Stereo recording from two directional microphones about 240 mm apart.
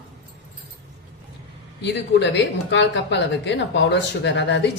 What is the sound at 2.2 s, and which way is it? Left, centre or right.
Speech, left.